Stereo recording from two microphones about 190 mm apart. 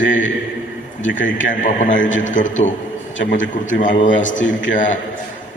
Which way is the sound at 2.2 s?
40° left (ahead or behind).